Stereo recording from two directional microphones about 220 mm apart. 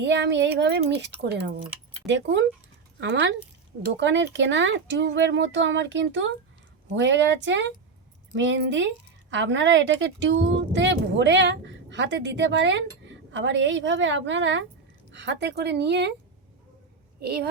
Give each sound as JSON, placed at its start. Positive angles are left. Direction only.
{"t": 0.0, "sound": "speech", "side_deg": -50}
{"t": 17.2, "sound": "speech", "side_deg": -45}